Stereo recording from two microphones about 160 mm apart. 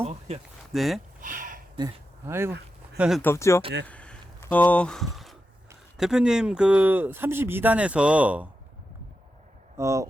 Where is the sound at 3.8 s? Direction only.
10° left (ahead or behind).